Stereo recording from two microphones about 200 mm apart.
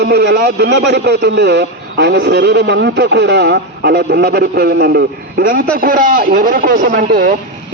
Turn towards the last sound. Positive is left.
turn(degrees=-45)  # may be behind; listen again after turning